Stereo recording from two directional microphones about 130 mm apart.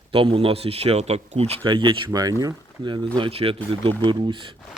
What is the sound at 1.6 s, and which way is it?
A man's voice, 40° right (ahead or behind).